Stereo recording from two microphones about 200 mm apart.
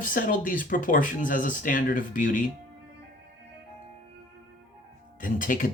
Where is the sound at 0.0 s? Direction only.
45° left (ahead or behind).